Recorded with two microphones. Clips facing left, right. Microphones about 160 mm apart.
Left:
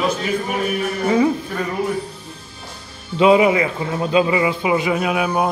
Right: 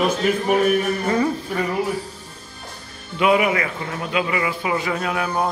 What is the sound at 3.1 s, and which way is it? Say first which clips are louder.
A man's voice: left 5 dB; 25° left (ahead or behind).